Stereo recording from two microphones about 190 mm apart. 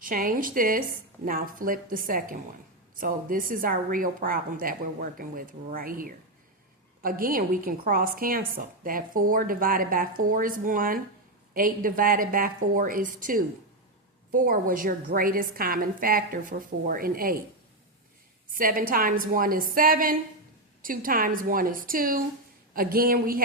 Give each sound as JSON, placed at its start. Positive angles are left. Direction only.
{"t": 0.0, "sound": "a woman's voice", "side_deg": -45}
{"t": 18.5, "sound": "a woman's voice", "side_deg": -45}